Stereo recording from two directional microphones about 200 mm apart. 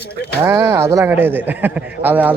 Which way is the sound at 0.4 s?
15° right (ahead or behind).